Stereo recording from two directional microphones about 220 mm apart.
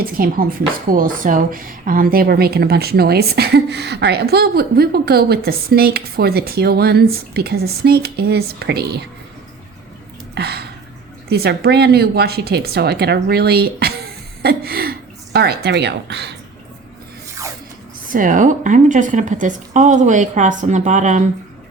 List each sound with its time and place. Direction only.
0.0 s speech: 40° right (ahead or behind)
10.3 s a sound: 45° right (ahead or behind)
11.3 s a woman's voice: 45° right (ahead or behind)
18.1 s speech: 35° right (ahead or behind)